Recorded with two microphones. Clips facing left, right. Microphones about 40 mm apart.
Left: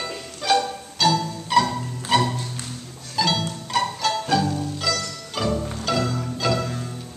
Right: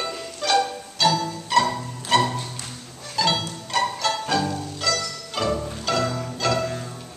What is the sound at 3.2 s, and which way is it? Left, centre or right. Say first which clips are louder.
Music: even; centre.